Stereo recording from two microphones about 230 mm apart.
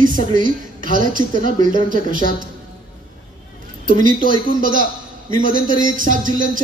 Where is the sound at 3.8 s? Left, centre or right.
Right.